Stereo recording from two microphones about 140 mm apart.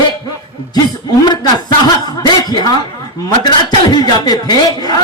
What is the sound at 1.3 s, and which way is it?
A man's voice, 30° left (ahead or behind).